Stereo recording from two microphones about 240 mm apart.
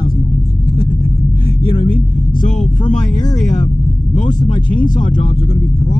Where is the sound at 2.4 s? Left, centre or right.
Left.